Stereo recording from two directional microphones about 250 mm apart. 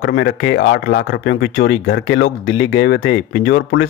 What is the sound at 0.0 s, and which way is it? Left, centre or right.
Speech, left.